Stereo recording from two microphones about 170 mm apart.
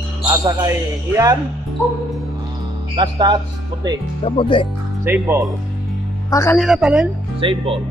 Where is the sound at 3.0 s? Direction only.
25° right (ahead or behind).